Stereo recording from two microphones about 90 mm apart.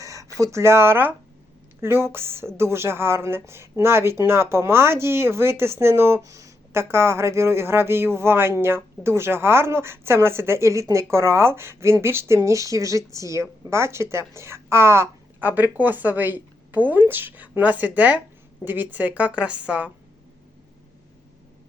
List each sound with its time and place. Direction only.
0.0 s a woman's voice: 35° right (ahead or behind); by 19.9 s 15° right (ahead or behind)